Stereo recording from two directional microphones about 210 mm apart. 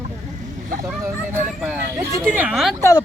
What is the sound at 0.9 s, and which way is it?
Speech, 5° right (ahead or behind).